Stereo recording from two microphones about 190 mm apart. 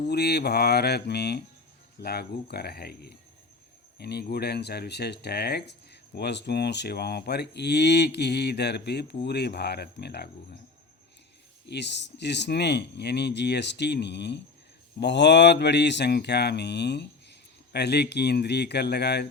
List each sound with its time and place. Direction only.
0.1 s speech: 60° left (ahead or behind)
11.7 s speech: 65° left (ahead or behind)